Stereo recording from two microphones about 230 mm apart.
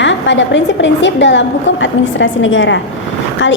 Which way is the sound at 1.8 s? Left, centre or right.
Left.